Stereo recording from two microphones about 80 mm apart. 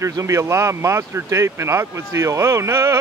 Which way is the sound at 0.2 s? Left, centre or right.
Right.